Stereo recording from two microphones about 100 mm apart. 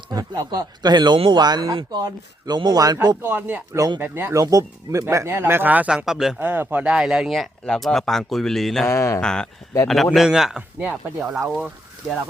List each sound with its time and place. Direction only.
0.1 s speech: 40° right (ahead or behind)
3.2 s speech: 20° right (ahead or behind)
3.8 s speech: 40° right (ahead or behind)
4.0 s speech: 20° right (ahead or behind)
6.1 s speech: 5° right (ahead or behind)
6.4 s speech: 20° right (ahead or behind); by 8.9 s centre (ahead or behind)
8.9 s speech: 30° left (ahead or behind)
9.2 s speech: 10° left (ahead or behind)